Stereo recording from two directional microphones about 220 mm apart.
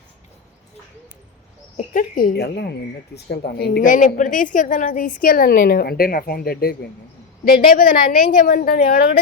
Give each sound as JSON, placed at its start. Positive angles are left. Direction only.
{"t": 1.7, "sound": "a woman's voice", "side_deg": 35}